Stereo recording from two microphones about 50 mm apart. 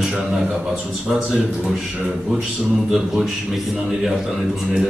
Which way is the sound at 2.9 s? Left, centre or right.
Centre.